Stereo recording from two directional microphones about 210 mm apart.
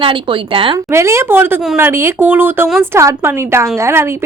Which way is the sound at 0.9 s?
15° right (ahead or behind).